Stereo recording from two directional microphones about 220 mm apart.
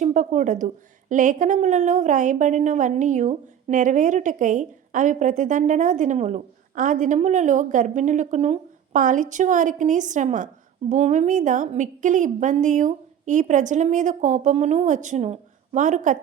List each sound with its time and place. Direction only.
0.0 s a woman's voice: 35° right (ahead or behind)